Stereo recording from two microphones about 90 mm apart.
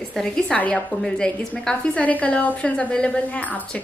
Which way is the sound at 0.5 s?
15° left (ahead or behind).